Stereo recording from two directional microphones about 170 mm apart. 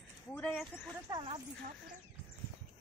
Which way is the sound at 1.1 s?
25° right (ahead or behind).